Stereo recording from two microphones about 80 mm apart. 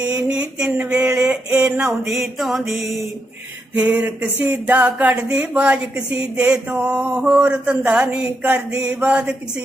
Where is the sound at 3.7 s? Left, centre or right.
Centre.